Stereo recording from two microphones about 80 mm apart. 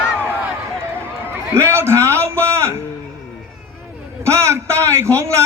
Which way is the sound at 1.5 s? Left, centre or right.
Right.